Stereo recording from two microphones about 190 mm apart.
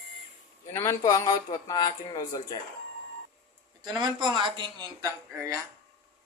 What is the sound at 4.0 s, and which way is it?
Speech, 20° right (ahead or behind).